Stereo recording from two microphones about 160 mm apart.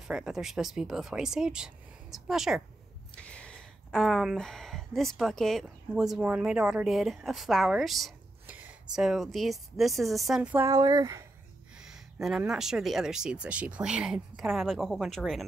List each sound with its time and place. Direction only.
0.1 s speech: 5° right (ahead or behind)
10.5 s speech: 15° right (ahead or behind)
11.8 s speech: 5° right (ahead or behind)